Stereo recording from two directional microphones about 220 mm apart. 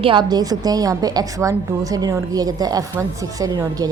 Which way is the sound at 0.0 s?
20° right (ahead or behind).